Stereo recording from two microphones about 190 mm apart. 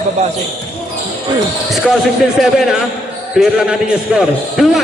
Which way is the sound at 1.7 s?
Centre (ahead or behind).